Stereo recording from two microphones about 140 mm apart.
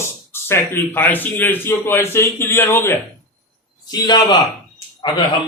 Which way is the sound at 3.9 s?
30° left (ahead or behind).